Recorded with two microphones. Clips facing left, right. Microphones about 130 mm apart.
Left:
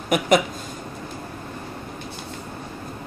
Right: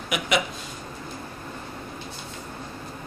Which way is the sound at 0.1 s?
45° left (ahead or behind).